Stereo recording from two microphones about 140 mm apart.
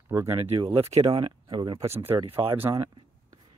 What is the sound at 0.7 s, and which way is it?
Speech, 45° right (ahead or behind).